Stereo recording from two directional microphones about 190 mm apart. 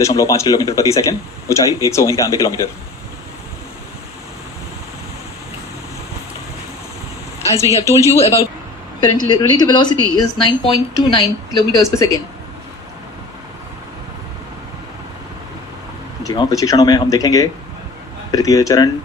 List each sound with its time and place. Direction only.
0.0 s a man's voice: 15° left (ahead or behind)
7.5 s speech: 15° right (ahead or behind)
8.0 s a man's voice: 15° left (ahead or behind)
16.2 s a woman's voice: 20° left (ahead or behind)